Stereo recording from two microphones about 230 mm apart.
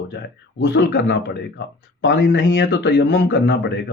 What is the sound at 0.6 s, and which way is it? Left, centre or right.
Speech, left.